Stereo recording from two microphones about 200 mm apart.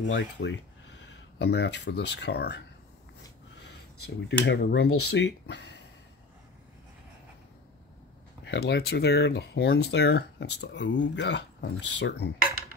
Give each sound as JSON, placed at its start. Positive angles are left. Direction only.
{"t": 0.0, "sound": "speech", "side_deg": 65}
{"t": 4.3, "sound": "speech", "side_deg": 60}
{"t": 8.5, "sound": "speech", "side_deg": 60}